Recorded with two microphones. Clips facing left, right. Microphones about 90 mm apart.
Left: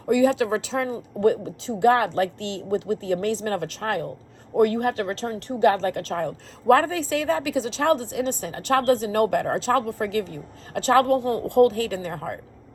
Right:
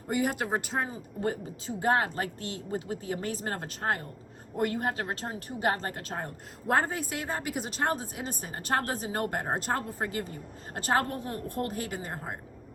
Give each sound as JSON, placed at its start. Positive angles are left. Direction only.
{"t": 0.1, "sound": "a woman's voice", "side_deg": 90}